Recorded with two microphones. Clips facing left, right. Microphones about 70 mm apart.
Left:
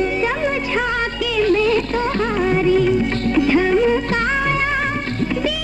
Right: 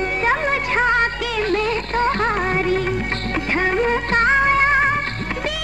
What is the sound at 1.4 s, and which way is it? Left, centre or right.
Music, right.